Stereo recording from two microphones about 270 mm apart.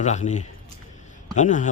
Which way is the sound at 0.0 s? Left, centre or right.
Left.